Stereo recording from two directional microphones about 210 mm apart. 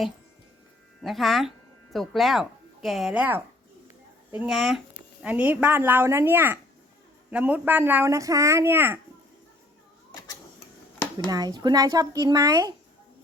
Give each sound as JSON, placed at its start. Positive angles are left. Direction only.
{"t": 1.0, "sound": "speech", "side_deg": 0}
{"t": 11.3, "sound": "speech", "side_deg": -20}